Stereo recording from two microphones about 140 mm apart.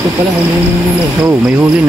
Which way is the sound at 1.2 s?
15° right (ahead or behind).